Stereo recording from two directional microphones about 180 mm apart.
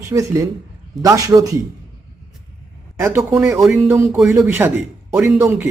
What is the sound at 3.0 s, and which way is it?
Speech, 15° right (ahead or behind).